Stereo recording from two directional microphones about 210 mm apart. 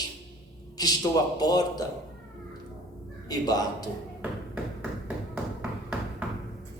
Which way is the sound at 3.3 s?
20° left (ahead or behind).